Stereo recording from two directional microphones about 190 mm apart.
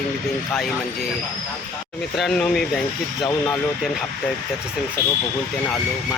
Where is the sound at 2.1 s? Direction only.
Centre (ahead or behind).